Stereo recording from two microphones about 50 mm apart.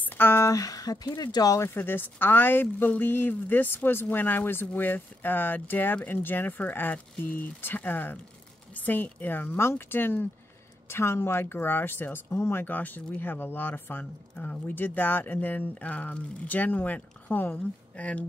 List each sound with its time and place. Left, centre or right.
0.0 s a sound: left
1.7 s speech: left
9.6 s speech: left
10.9 s speech: left
12.6 s speech: left
14.3 s speech: left
17.9 s speech: left